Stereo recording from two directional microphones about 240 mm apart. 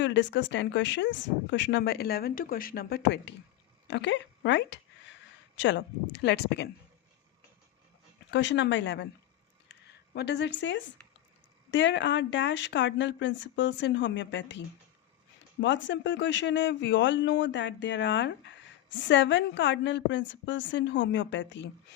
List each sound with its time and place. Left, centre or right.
0.0 s speech: left
8.3 s speech: left
10.2 s speech: left
15.6 s speech: left